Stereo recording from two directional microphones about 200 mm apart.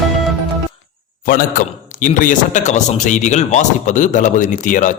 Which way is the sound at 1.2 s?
45° left (ahead or behind).